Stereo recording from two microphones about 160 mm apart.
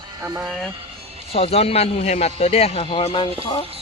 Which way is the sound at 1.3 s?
40° left (ahead or behind).